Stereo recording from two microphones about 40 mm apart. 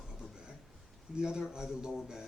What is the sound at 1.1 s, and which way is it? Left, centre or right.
Speech, centre.